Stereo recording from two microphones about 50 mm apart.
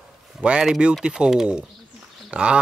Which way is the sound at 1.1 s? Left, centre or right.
Centre.